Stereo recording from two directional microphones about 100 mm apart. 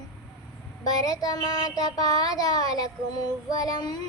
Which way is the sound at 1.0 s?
40° left (ahead or behind).